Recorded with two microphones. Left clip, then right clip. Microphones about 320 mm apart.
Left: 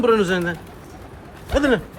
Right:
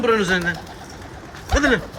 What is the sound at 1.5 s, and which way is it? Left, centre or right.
Speech, centre.